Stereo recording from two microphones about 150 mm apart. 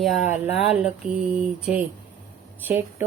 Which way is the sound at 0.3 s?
10° right (ahead or behind).